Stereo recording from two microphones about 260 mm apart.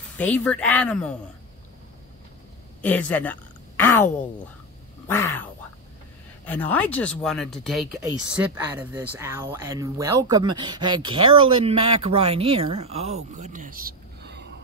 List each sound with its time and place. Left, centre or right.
0.2 s speech: centre
2.8 s a woman's voice: centre
8.5 s speech: centre; by 14.5 s right